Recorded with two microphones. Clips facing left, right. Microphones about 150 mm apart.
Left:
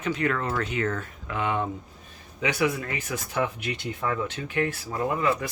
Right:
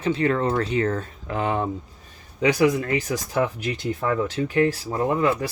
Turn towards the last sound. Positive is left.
turn(degrees=-30)  # may be behind; listen again after turning